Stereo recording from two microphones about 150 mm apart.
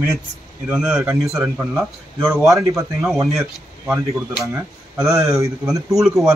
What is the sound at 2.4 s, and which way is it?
Speech, 20° right (ahead or behind).